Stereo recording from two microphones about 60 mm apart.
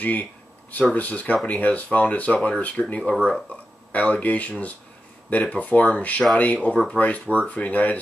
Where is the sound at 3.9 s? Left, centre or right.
Left.